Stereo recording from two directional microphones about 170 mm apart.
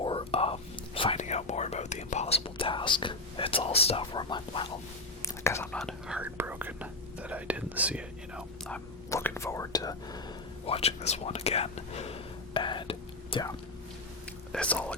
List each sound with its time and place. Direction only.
0.0 s whispering: 30° left (ahead or behind)
5.2 s whispering: 15° left (ahead or behind)
5.8 s whispering: 5° right (ahead or behind)
9.0 s whispering: 15° left (ahead or behind)
10.7 s whispering: 35° left (ahead or behind)
14.5 s speech: 5° left (ahead or behind)